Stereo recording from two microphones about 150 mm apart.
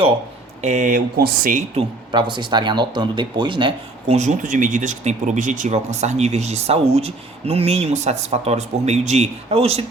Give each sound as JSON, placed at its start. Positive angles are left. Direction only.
{"t": 0.6, "sound": "speech", "side_deg": -50}
{"t": 2.1, "sound": "speech", "side_deg": -30}